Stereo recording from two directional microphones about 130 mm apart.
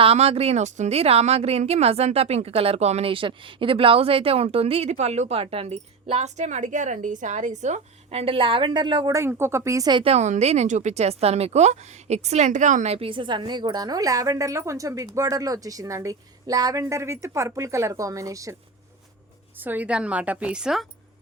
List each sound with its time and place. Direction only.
0.0 s a woman's voice: 50° right (ahead or behind)
9.1 s speech: 20° right (ahead or behind)
10.0 s speech: 55° right (ahead or behind); by 18.5 s 25° right (ahead or behind)
19.5 s a woman's voice: 15° right (ahead or behind)